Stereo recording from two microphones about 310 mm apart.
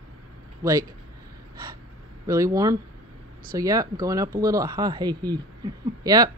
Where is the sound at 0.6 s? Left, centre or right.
Centre.